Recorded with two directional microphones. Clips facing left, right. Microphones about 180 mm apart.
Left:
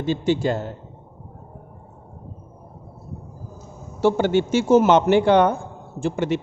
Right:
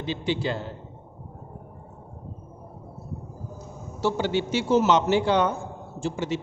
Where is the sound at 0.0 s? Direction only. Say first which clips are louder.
Left 6 dB; 45° left (ahead or behind).